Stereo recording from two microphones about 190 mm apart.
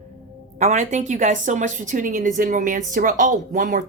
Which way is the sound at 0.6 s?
40° right (ahead or behind).